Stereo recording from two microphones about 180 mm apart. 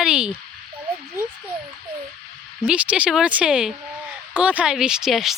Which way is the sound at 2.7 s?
5° right (ahead or behind).